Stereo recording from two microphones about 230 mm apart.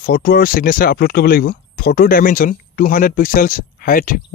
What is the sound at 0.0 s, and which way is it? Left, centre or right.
Speech, left.